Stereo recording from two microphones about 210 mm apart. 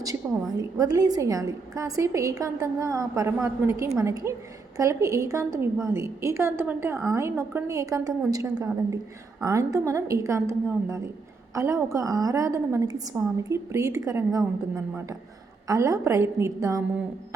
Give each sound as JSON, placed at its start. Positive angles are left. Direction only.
{"t": 0.2, "sound": "a woman's voice", "side_deg": -10}
{"t": 15.6, "sound": "a woman's voice", "side_deg": -15}